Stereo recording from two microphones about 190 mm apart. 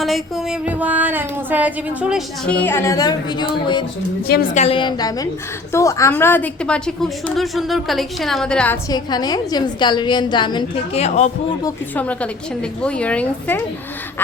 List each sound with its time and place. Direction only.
0.0 s music: centre (ahead or behind)
2.5 s speech: 10° left (ahead or behind)
4.3 s a woman's voice: 50° left (ahead or behind)
4.6 s a woman's voice: 25° left (ahead or behind); by 8.8 s 5° left (ahead or behind)
8.9 s a woman's voice: 20° left (ahead or behind)
11.6 s speech: 10° left (ahead or behind)